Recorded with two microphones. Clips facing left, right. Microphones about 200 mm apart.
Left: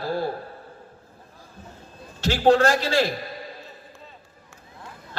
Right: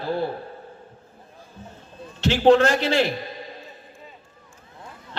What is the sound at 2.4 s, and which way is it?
Speech, 20° right (ahead or behind).